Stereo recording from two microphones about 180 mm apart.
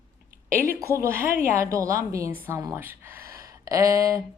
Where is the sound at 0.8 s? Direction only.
15° right (ahead or behind).